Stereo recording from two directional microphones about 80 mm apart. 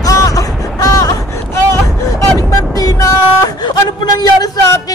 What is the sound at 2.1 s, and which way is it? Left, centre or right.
Vehicle, left.